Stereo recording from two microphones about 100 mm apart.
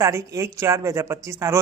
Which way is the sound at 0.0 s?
30° right (ahead or behind).